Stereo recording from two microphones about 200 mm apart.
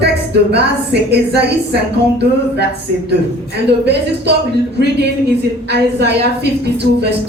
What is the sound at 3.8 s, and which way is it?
Speech, 55° right (ahead or behind).